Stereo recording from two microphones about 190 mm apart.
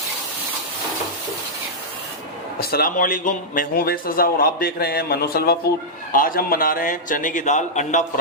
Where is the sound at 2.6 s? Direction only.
50° left (ahead or behind).